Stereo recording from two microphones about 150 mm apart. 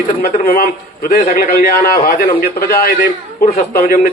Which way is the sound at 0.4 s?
90° left.